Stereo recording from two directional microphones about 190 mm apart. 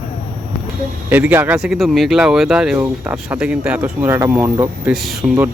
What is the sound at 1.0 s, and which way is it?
Speech, 10° right (ahead or behind).